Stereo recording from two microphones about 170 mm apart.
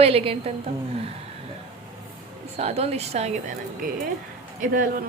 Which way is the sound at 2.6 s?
40° right (ahead or behind).